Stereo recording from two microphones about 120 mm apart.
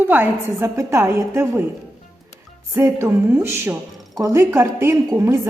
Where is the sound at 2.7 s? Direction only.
20° right (ahead or behind).